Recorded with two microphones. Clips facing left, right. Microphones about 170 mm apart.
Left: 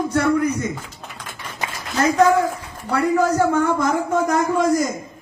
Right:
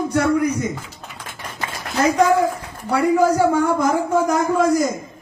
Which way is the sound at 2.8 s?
10° right (ahead or behind).